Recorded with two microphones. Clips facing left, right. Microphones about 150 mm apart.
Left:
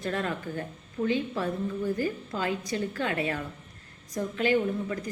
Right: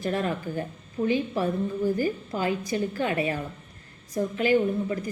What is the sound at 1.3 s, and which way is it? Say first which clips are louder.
Speech: right 4 dB; 25° right (ahead or behind).